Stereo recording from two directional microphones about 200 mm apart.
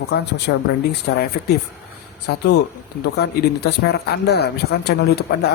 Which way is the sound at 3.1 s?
50° left (ahead or behind).